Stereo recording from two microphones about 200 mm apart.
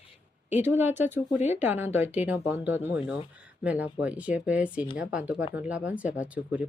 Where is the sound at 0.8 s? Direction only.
10° right (ahead or behind).